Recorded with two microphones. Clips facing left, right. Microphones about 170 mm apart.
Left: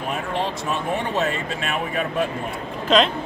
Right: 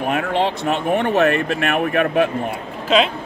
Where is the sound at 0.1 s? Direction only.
75° right (ahead or behind).